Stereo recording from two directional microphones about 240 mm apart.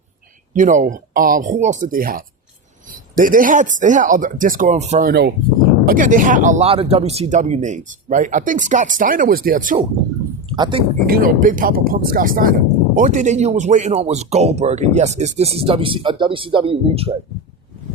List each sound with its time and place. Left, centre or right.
0.5 s speech: right
10.5 s speech: centre
11.0 s speech: right